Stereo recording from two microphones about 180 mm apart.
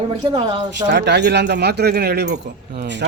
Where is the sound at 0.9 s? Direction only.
70° right (ahead or behind).